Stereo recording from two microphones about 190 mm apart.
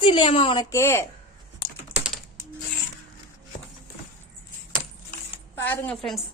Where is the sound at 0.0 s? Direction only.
25° left (ahead or behind).